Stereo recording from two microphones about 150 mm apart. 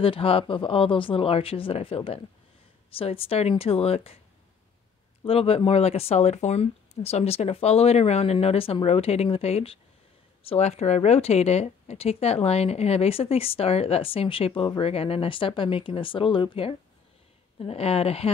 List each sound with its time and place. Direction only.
0.0 s speech: 40° left (ahead or behind)
5.2 s speech: 40° left (ahead or behind)